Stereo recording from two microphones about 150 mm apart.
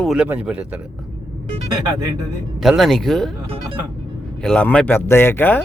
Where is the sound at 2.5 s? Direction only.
Centre (ahead or behind).